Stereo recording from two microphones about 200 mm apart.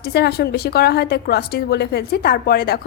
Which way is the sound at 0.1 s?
55° left (ahead or behind).